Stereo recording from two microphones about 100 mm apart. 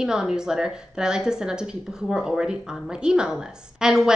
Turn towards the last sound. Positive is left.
turn(degrees=-5)  # may be behind; listen again after turning